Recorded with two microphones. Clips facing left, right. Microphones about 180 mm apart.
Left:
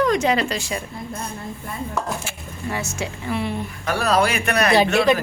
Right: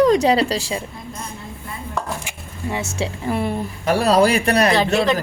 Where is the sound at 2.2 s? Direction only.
20° right (ahead or behind).